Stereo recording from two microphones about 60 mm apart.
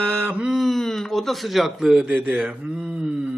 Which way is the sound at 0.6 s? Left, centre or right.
Centre.